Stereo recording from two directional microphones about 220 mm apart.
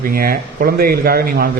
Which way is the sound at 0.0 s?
40° right (ahead or behind).